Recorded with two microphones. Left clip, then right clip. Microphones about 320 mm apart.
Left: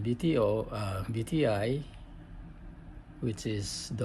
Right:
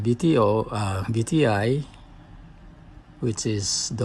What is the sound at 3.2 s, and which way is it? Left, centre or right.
Speech, centre.